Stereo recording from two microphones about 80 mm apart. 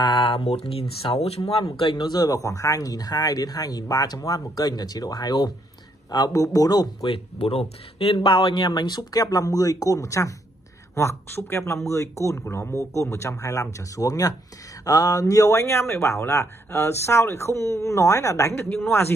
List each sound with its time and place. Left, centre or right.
0.0 s a sound: left
1.0 s speech: left
8.2 s speech: left
18.7 s speech: left